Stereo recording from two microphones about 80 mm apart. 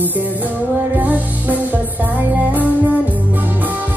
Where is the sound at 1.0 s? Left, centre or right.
Right.